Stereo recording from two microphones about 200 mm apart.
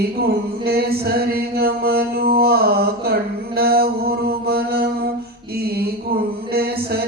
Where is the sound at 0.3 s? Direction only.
50° right (ahead or behind).